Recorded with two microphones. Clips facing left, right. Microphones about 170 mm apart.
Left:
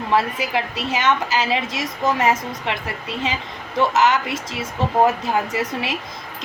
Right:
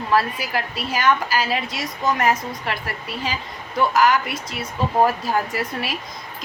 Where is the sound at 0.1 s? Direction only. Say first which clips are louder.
Left 1 dB; 20° left (ahead or behind).